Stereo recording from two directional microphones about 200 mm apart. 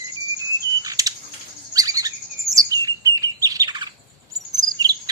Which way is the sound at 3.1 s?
20° right (ahead or behind).